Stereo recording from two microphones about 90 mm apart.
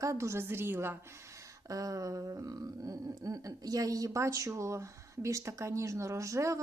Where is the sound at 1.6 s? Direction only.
40° right (ahead or behind).